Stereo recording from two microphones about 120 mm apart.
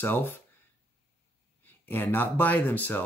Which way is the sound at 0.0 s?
15° left (ahead or behind).